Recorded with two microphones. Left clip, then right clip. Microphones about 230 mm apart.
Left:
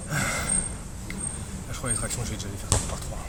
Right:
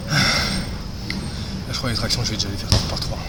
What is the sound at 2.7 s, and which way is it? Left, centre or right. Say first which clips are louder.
Speech: right 6 dB; left.